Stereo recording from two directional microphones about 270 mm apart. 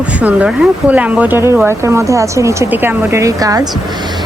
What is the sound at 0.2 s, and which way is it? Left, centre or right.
Speech, centre.